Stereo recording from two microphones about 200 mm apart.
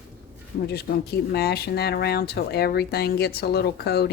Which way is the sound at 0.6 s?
55° left (ahead or behind).